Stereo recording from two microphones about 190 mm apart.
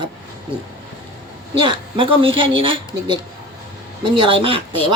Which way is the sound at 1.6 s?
25° right (ahead or behind).